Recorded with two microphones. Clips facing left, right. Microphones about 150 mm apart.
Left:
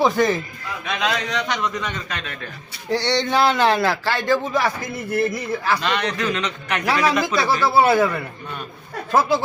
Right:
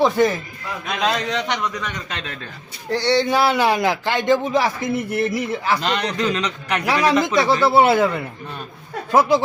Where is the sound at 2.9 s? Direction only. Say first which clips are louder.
Right 2 dB; 5° right (ahead or behind).